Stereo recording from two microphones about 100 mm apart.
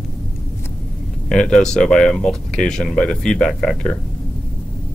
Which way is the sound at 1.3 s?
5° left (ahead or behind).